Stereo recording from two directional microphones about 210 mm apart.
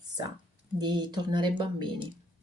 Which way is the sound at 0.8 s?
20° right (ahead or behind).